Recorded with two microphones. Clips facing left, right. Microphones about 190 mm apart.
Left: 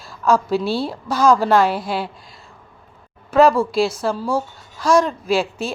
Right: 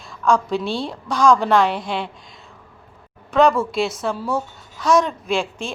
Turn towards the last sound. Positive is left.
turn(degrees=5)  # may be behind; listen again after turning